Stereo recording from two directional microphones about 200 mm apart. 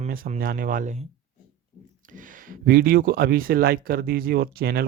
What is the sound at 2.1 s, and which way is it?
Speech, 40° right (ahead or behind).